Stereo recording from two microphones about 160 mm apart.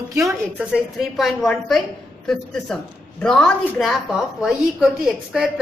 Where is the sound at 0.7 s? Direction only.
Centre (ahead or behind).